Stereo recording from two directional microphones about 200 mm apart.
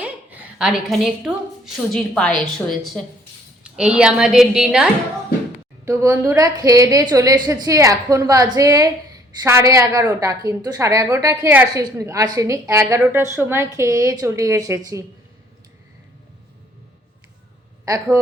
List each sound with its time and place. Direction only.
0.0 s a woman's voice: 10° right (ahead or behind)
5.8 s a woman's voice: 15° right (ahead or behind)
17.8 s a woman's voice: 15° right (ahead or behind)